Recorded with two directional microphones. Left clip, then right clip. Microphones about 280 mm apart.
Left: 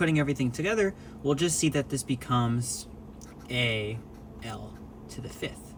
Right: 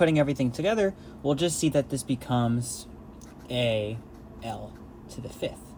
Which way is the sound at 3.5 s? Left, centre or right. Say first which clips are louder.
Right 2 dB; centre.